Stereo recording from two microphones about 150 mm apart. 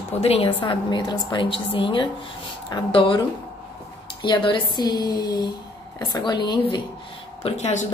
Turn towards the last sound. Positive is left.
turn(degrees=50)  # may be behind; listen again after turning